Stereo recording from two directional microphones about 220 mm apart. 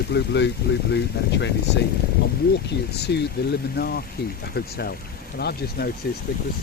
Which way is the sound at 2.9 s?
50° left (ahead or behind).